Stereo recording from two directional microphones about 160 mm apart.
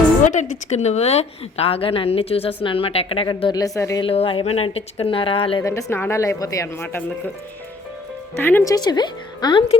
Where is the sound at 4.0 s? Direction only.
35° left (ahead or behind).